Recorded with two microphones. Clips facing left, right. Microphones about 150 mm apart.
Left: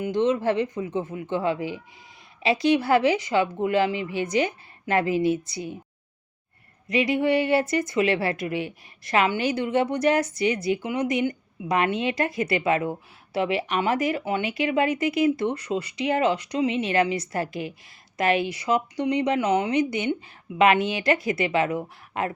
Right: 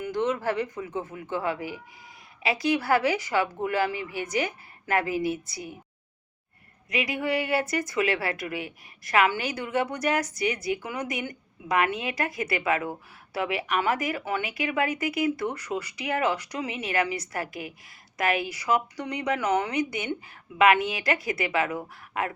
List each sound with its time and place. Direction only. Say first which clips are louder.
0.0 s a woman's voice: left 5 dB; 20° left (ahead or behind)
6.8 s a woman's voice: left 6 dB; 25° left (ahead or behind)